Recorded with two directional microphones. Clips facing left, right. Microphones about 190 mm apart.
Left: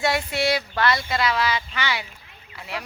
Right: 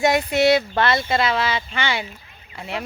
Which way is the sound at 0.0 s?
20° right (ahead or behind).